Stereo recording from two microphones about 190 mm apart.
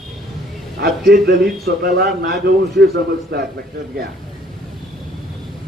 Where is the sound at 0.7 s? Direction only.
60° right (ahead or behind).